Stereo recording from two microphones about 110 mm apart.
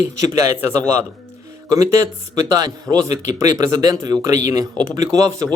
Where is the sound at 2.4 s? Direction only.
35° right (ahead or behind).